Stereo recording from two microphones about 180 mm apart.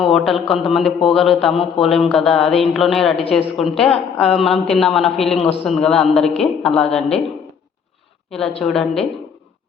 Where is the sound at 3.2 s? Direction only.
35° left (ahead or behind).